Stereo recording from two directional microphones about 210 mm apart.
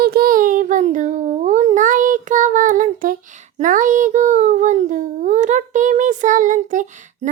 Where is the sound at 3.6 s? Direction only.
40° right (ahead or behind).